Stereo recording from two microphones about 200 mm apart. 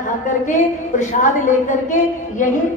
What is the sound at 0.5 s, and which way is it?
A woman's voice, 40° left (ahead or behind).